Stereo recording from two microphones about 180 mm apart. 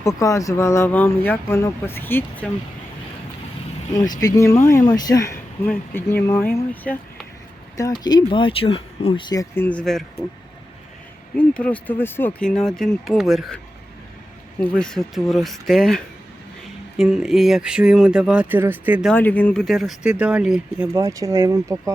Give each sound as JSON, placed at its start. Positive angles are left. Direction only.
{"t": 0.0, "sound": "speech", "side_deg": 15}
{"t": 3.9, "sound": "speech", "side_deg": 20}
{"t": 7.8, "sound": "speech", "side_deg": 20}
{"t": 11.3, "sound": "speech", "side_deg": 5}
{"t": 14.6, "sound": "speech", "side_deg": 5}
{"t": 19.1, "sound": "speech", "side_deg": 10}
{"t": 20.9, "sound": "speech", "side_deg": -15}